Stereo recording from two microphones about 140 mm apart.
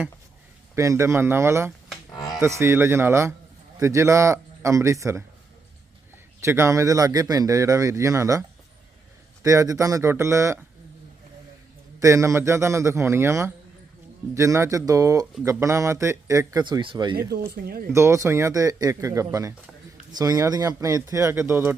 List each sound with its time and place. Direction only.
0.8 s speech: 20° right (ahead or behind)
6.4 s speech: 20° right (ahead or behind)
11.9 s speech: 20° right (ahead or behind)
16.6 s speech: 35° right (ahead or behind)
17.9 s speech: 20° right (ahead or behind)